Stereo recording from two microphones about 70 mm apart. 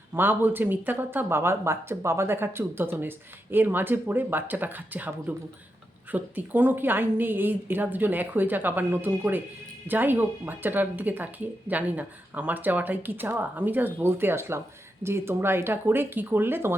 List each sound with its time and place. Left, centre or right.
0.1 s speech: right